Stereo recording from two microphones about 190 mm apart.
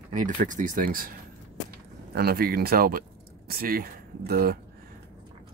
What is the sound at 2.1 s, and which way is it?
Speech, 55° right (ahead or behind).